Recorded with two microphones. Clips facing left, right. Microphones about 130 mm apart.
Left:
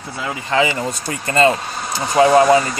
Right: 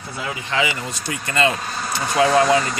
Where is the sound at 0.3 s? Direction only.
35° left (ahead or behind).